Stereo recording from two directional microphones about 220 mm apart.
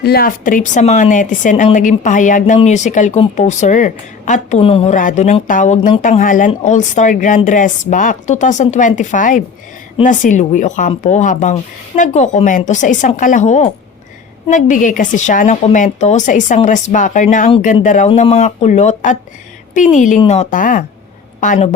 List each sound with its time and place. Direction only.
0.0 s speech: 45° left (ahead or behind)